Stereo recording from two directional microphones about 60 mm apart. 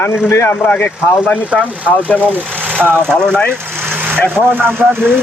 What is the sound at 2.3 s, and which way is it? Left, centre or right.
Vehicle, right.